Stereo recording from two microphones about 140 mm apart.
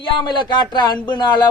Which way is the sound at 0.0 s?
35° left (ahead or behind).